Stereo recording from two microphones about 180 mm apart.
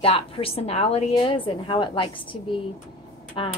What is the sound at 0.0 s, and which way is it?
A woman's voice, 35° left (ahead or behind).